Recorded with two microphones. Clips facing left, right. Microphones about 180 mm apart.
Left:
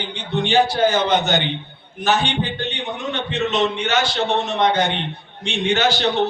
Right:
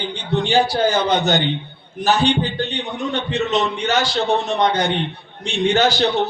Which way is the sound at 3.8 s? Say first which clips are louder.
Right 1 dB; 35° right (ahead or behind).